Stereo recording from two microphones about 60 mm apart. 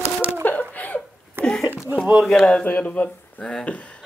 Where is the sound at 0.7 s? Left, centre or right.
Left.